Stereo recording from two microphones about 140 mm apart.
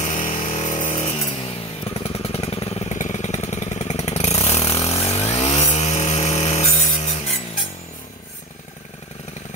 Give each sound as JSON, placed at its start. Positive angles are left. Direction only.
{"t": 0.0, "sound": "chainsaw", "side_deg": 55}
{"t": 2.0, "sound": "vehicle", "side_deg": 45}
{"t": 5.5, "sound": "vehicle", "side_deg": 20}
{"t": 5.8, "sound": "sawing", "side_deg": 55}